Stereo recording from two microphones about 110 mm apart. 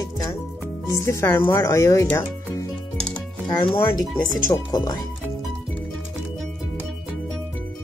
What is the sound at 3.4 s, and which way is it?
Speech, 50° left (ahead or behind).